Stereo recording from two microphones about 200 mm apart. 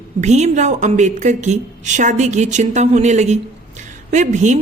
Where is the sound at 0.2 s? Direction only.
35° right (ahead or behind).